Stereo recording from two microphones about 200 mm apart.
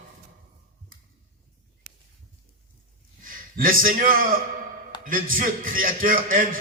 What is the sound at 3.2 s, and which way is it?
A man's voice, 45° right (ahead or behind).